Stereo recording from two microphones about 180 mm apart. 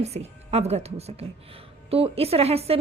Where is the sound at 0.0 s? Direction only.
35° right (ahead or behind).